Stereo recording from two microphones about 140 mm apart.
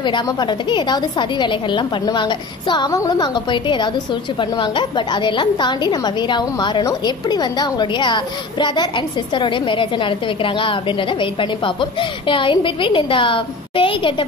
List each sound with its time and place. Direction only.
0.0 s a woman's voice: 35° left (ahead or behind)